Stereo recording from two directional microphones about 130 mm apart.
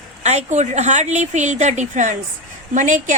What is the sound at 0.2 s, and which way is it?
A woman's voice, 60° right (ahead or behind).